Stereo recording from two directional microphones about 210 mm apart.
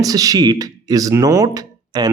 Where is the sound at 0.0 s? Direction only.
15° right (ahead or behind).